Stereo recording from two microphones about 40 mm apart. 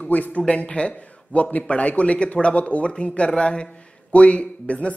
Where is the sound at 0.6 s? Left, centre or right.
Left.